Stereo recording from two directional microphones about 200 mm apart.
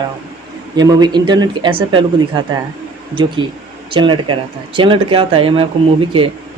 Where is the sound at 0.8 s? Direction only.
20° right (ahead or behind).